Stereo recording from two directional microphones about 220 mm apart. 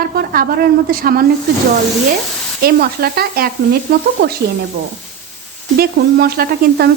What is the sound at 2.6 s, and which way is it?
Sizzle, 45° right (ahead or behind).